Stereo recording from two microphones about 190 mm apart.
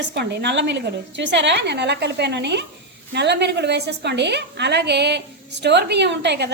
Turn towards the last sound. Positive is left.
turn(degrees=-65)  # may be behind; listen again after turning